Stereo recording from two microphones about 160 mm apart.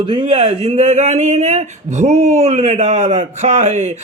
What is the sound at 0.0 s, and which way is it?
Speech, 30° right (ahead or behind).